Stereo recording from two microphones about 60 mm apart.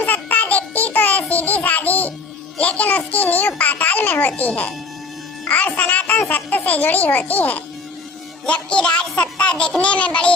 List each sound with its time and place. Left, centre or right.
0.0 s babbling: left
1.3 s baby laughter: left
2.6 s a child's voice: left